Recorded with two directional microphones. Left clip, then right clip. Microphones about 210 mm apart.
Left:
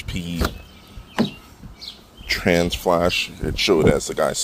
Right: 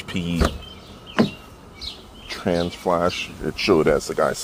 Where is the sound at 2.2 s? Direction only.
30° left (ahead or behind).